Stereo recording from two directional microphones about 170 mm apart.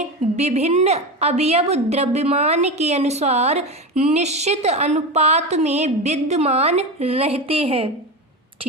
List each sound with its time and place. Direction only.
0.3 s a woman's voice: 40° right (ahead or behind)